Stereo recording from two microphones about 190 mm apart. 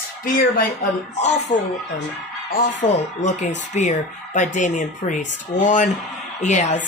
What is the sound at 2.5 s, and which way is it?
Speech, 40° left (ahead or behind).